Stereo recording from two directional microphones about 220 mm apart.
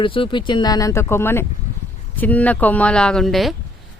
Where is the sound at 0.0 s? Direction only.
25° left (ahead or behind).